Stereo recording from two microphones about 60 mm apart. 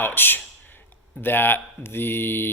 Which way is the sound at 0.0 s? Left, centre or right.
Left.